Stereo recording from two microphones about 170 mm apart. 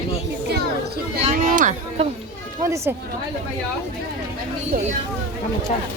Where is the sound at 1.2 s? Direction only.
45° right (ahead or behind).